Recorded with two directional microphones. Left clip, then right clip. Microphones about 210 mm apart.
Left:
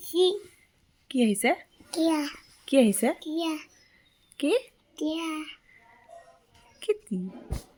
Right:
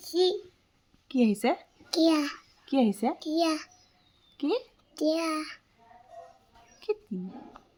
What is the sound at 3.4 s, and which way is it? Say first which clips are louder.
Speech: right 5 dB; 10° right (ahead or behind).